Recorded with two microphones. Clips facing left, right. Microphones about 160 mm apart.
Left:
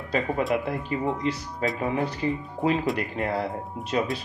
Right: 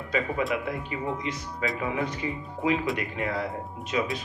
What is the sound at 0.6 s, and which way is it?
Speech, 35° left (ahead or behind).